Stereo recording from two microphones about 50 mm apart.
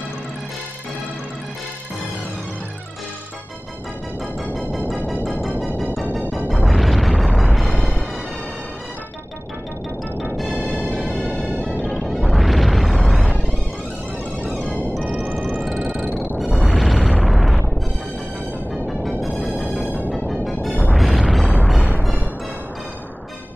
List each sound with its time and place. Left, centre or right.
5.0 s music: centre
6.5 s music: centre
11.1 s music: right
12.1 s smash: centre
14.5 s music: left
15.6 s music: centre
18.9 s music: centre